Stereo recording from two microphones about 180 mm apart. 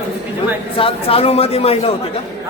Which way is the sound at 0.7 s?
30° left (ahead or behind).